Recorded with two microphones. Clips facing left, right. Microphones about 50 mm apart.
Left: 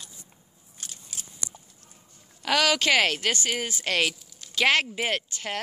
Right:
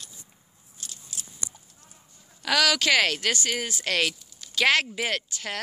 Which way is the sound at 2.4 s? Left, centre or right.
Left.